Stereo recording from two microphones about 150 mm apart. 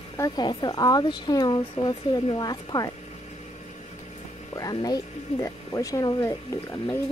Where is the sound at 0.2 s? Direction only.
30° left (ahead or behind).